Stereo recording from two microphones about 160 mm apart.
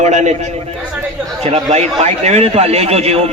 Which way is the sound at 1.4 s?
40° right (ahead or behind).